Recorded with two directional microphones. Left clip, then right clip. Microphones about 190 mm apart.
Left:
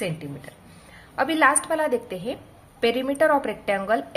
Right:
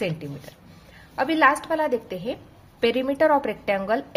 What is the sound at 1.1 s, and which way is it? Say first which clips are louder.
A woman's voice: even; 15° right (ahead or behind).